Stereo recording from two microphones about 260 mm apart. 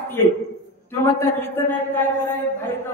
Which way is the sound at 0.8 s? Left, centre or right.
Centre.